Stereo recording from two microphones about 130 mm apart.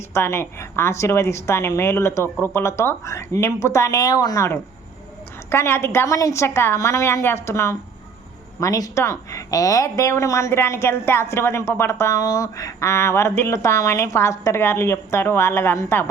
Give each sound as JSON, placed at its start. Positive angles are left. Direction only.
{"t": 0.1, "sound": "a woman's voice", "side_deg": 20}